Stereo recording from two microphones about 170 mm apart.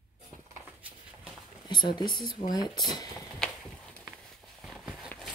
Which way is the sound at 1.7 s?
25° left (ahead or behind).